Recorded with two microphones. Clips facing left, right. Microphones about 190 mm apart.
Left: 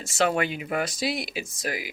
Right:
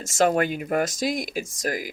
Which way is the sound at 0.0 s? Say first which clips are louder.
Right 3 dB; 45° right (ahead or behind).